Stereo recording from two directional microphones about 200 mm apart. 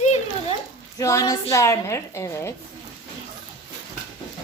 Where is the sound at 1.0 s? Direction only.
15° left (ahead or behind).